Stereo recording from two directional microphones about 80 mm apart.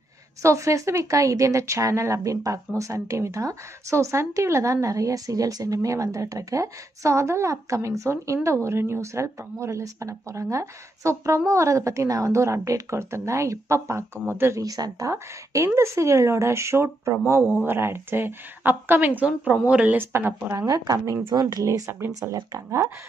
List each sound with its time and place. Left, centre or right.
0.4 s speech: right
14.6 s speech: right; by 20.0 s centre
20.0 s speech: right
20.5 s a woman's voice: right
21.3 s speech: right
21.6 s speech: right
22.2 s speech: right